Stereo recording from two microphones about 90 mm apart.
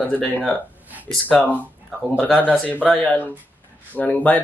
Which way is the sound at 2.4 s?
15° left (ahead or behind).